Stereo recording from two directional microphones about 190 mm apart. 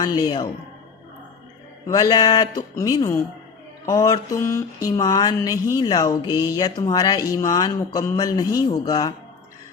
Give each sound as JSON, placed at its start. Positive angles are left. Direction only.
{"t": 0.0, "sound": "a man's voice", "side_deg": 20}
{"t": 1.9, "sound": "a man's voice", "side_deg": 20}
{"t": 3.8, "sound": "mantra", "side_deg": 20}
{"t": 5.7, "sound": "a man's voice", "side_deg": 20}